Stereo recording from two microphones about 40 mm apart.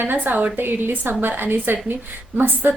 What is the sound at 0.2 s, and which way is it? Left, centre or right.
Speech, right.